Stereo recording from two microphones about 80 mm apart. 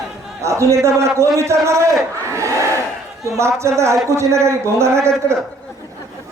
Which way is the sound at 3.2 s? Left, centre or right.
Right.